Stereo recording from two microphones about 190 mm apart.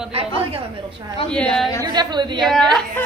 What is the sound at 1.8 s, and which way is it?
Speech, 25° right (ahead or behind).